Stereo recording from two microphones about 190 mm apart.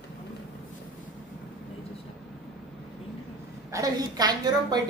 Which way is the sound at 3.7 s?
20° right (ahead or behind).